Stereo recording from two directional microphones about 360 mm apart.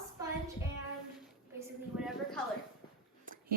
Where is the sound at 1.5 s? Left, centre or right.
Centre.